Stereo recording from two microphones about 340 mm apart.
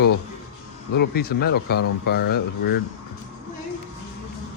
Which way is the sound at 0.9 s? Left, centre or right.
Left.